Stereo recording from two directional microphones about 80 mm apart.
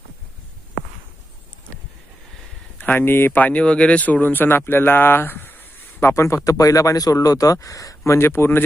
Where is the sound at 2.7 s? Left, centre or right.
Left.